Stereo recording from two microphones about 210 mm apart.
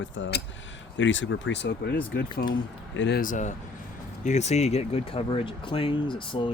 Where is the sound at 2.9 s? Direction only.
55° left (ahead or behind).